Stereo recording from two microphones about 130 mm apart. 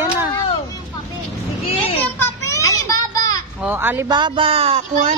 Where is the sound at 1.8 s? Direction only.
20° left (ahead or behind).